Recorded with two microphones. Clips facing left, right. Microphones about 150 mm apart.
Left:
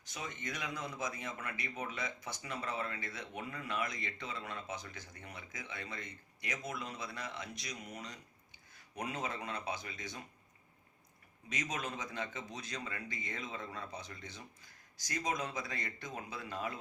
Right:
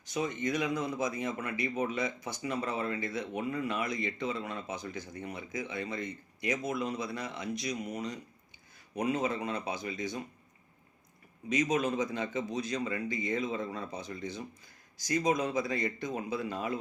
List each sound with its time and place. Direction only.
0.1 s speech: 20° right (ahead or behind)
11.4 s speech: 15° right (ahead or behind)